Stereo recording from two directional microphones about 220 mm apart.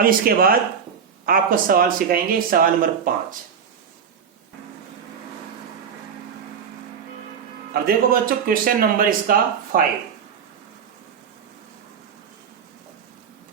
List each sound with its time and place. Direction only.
0.0 s speech: 40° right (ahead or behind)
7.7 s speech: 40° right (ahead or behind)